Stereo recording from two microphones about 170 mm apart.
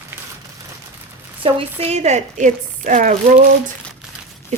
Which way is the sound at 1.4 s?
35° right (ahead or behind).